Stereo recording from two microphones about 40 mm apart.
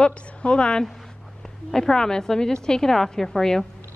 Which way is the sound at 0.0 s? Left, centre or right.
Left.